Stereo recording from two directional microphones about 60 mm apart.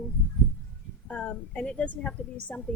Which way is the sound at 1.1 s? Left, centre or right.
Centre.